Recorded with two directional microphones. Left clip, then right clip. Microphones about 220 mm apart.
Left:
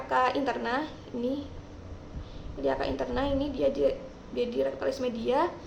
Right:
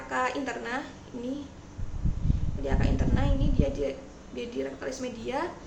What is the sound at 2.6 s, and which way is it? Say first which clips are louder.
A woman's voice: left 3 dB; 15° left (ahead or behind).